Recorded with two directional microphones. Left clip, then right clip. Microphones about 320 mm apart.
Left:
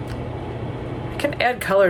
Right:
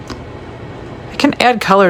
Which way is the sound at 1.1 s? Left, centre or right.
Centre.